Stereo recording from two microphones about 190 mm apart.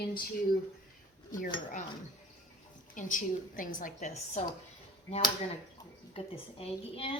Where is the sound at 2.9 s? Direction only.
45° left (ahead or behind).